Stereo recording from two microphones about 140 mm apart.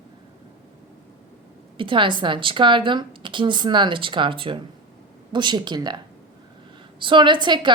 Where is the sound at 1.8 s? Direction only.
35° right (ahead or behind).